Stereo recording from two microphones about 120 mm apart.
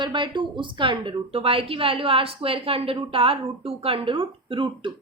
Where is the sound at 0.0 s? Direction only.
40° right (ahead or behind).